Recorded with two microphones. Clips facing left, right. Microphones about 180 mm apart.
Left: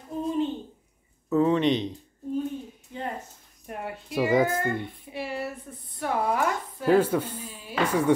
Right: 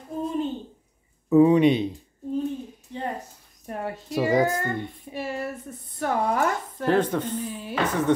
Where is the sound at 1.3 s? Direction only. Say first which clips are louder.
Right 5 dB; 10° right (ahead or behind).